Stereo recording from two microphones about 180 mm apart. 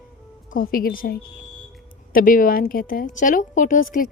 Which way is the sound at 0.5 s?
50° left (ahead or behind).